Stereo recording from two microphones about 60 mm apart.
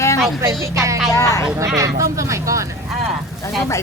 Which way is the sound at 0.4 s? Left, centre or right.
Right.